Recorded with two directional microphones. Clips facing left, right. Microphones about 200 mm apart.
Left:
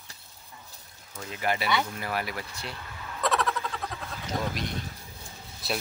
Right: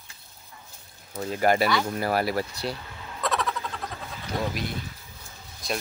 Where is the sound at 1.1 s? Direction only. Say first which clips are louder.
Right 7 dB; 40° right (ahead or behind).